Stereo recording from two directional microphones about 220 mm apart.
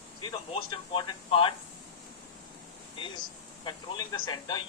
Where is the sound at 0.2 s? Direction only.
20° left (ahead or behind).